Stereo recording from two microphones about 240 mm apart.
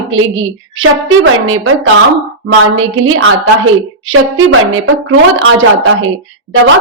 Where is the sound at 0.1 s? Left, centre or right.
Right.